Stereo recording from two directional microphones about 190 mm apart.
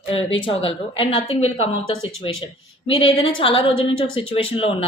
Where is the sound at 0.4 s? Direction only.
30° left (ahead or behind).